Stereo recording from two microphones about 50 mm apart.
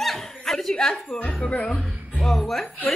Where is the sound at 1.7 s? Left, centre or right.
Centre.